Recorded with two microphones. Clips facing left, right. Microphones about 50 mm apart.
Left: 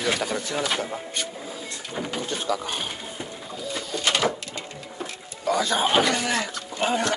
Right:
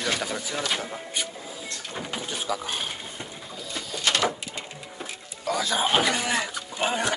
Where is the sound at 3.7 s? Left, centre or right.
Centre.